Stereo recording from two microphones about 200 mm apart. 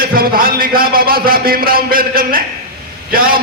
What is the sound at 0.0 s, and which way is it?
A man's voice, 45° right (ahead or behind).